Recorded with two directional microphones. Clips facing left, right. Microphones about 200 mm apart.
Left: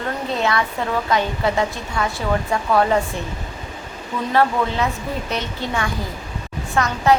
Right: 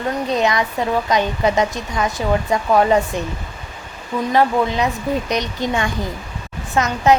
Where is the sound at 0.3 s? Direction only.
15° right (ahead or behind).